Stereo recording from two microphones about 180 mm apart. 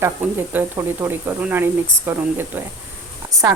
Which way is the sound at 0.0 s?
10° right (ahead or behind).